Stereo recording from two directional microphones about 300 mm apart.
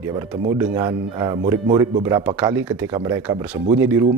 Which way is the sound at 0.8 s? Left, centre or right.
Centre.